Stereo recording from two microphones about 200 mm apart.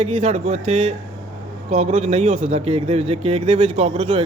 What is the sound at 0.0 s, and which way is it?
A man's voice, 30° right (ahead or behind).